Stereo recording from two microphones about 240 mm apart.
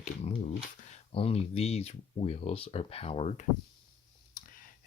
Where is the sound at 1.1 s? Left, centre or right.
Left.